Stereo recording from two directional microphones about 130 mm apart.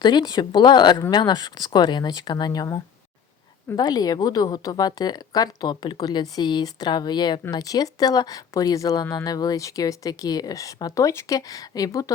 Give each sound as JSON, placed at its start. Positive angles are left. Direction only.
{"t": 0.0, "sound": "a woman's voice", "side_deg": 35}